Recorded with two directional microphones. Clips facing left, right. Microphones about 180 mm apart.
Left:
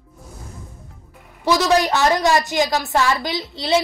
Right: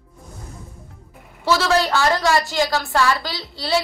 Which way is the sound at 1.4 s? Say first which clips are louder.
Left 2 dB; 15° left (ahead or behind).